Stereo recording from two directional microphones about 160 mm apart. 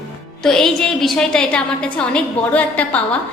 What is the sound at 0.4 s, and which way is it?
A woman's voice, 5° left (ahead or behind).